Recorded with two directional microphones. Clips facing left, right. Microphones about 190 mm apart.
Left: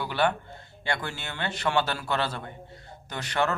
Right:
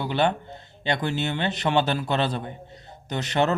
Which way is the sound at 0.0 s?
20° right (ahead or behind).